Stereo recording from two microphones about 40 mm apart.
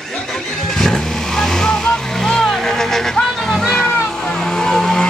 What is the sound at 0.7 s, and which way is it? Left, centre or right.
Vehicle, centre.